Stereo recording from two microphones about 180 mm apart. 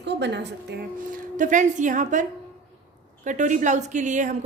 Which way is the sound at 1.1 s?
45° right (ahead or behind).